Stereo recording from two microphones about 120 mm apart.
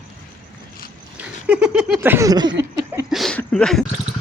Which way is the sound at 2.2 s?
35° right (ahead or behind).